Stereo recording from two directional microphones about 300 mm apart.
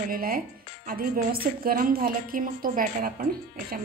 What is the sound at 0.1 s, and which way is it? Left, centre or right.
A woman's voice, right.